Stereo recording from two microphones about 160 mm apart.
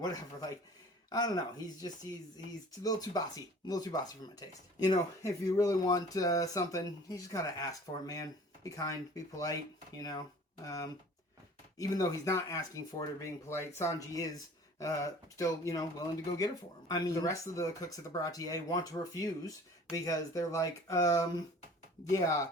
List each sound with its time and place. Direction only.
0.0 s speech: 25° left (ahead or behind)
11.8 s speech: 20° left (ahead or behind)